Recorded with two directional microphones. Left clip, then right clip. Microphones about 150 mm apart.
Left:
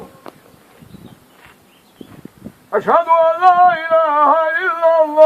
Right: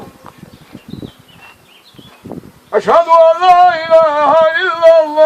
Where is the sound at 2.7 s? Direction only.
20° right (ahead or behind).